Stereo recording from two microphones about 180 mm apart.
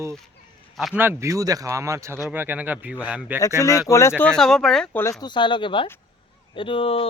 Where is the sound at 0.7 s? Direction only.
Centre (ahead or behind).